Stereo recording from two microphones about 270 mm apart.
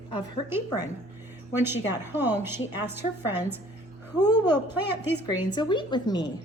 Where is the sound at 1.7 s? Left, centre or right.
Centre.